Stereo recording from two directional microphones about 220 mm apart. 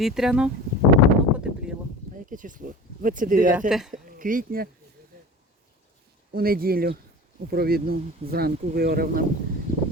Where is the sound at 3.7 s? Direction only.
Centre (ahead or behind).